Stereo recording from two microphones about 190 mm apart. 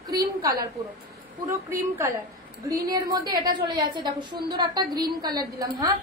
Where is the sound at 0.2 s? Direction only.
20° right (ahead or behind).